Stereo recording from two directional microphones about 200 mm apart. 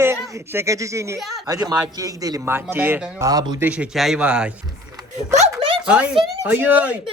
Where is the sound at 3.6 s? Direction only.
5° right (ahead or behind).